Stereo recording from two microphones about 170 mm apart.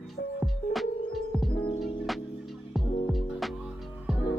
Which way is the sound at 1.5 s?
30° left (ahead or behind).